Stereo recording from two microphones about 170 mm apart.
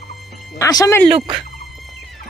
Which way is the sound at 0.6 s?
20° left (ahead or behind).